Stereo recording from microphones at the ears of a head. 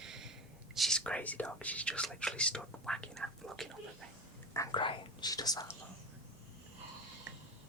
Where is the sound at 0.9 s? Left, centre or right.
Centre.